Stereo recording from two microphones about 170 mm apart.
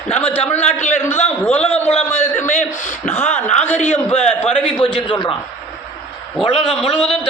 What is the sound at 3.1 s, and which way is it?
A man's voice, 10° left (ahead or behind).